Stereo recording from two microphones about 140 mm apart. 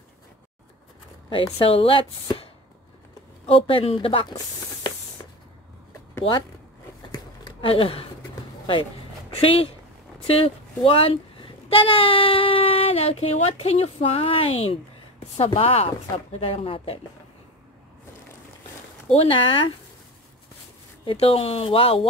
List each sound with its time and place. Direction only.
1.3 s speech: 40° left (ahead or behind)
3.4 s speech: 40° left (ahead or behind)
7.1 s a sound: 35° left (ahead or behind)
9.4 s speech: 40° left (ahead or behind)
19.1 s speech: 40° left (ahead or behind)
21.0 s speech: 40° left (ahead or behind)